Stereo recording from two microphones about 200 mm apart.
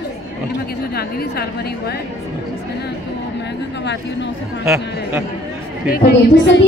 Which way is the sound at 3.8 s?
60° left (ahead or behind).